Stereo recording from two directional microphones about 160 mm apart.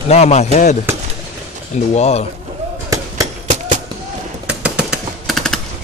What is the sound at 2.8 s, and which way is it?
Fireworks, 20° right (ahead or behind).